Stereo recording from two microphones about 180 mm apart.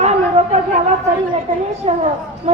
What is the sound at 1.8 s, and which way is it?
Speech, 35° right (ahead or behind).